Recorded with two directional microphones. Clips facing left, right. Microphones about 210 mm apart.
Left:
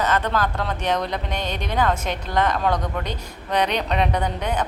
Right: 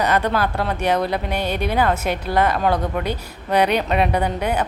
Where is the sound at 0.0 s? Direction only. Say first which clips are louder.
Right 3 dB; 10° right (ahead or behind).